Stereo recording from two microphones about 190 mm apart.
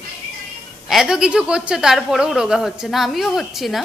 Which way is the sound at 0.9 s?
5° right (ahead or behind).